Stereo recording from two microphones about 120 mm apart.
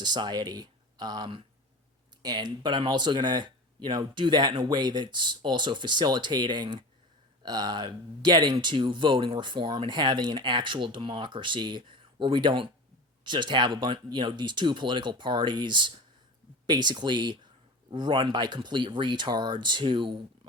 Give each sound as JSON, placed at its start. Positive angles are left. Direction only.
{"t": 0.0, "sound": "speech", "side_deg": -35}